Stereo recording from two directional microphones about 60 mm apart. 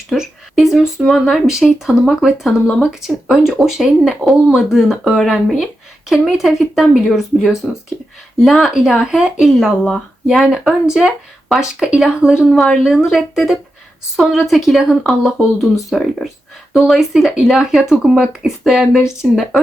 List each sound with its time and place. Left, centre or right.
0.1 s speech: centre
2.9 s speech: centre
12.5 s speech: centre